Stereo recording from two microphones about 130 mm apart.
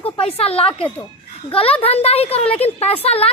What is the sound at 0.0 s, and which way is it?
A woman's voice, 50° left (ahead or behind).